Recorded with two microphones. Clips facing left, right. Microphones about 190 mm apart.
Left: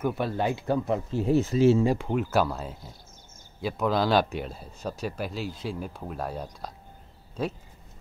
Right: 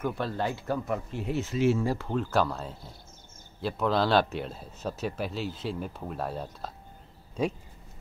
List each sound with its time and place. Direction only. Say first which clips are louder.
0.0 s speech: left 3 dB; 15° left (ahead or behind)
1.1 s speech: left 11 dB; 35° left (ahead or behind)
1.8 s speech: left 4 dB; 15° left (ahead or behind); by 6.7 s centre (ahead or behind)